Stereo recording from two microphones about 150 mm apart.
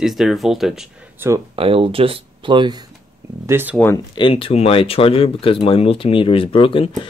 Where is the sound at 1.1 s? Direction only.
15° right (ahead or behind).